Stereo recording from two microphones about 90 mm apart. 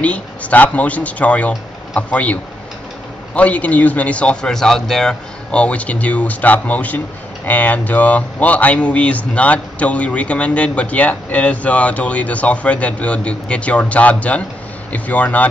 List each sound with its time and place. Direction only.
0.0 s speech: 15° left (ahead or behind)
3.3 s speech: 15° left (ahead or behind)